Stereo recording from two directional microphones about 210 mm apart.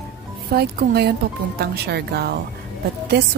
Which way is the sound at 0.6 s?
50° right (ahead or behind).